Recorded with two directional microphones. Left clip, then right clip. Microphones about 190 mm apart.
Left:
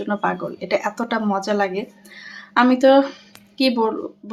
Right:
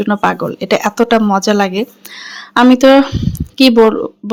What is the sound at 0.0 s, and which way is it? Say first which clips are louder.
Speech: right 8 dB; 45° right (ahead or behind).